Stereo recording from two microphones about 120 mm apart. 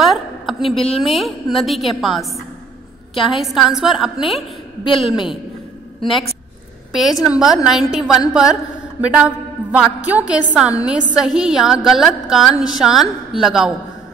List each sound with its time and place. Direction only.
0.0 s a sound: centre (ahead or behind)
0.6 s speech: 55° left (ahead or behind)
1.0 s a woman's voice: centre (ahead or behind)
4.8 s a woman's voice: 45° left (ahead or behind)
7.0 s a woman's voice: centre (ahead or behind)